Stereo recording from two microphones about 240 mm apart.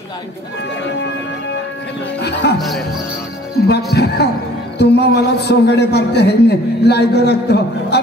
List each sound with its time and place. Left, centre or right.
2.4 s a man's voice: left
3.6 s a man's voice: left